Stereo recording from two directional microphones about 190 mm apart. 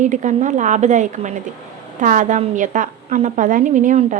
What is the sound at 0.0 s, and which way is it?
A woman's voice, 40° right (ahead or behind).